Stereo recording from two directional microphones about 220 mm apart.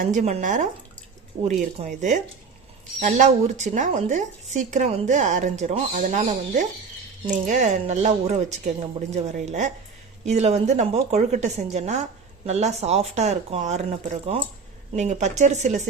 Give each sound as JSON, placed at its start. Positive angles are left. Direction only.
{"t": 0.0, "sound": "speech", "side_deg": -35}